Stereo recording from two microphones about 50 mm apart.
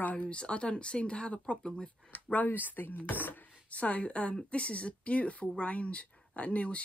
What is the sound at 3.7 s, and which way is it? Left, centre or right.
A woman's voice, left.